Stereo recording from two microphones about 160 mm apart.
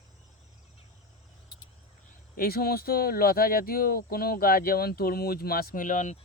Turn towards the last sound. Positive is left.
turn(degrees=50)  # may be behind; listen again after turning